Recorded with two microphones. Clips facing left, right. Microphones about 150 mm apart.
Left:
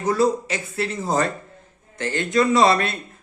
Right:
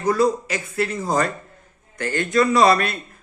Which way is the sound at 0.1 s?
30° left (ahead or behind).